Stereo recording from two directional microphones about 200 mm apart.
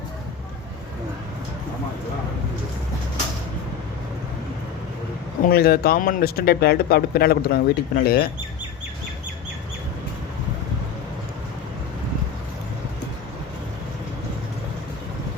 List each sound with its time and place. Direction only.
5.5 s speech: 50° left (ahead or behind)